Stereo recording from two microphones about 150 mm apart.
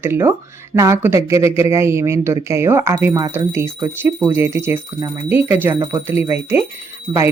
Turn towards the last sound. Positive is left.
turn(degrees=-30)  # may be behind; listen again after turning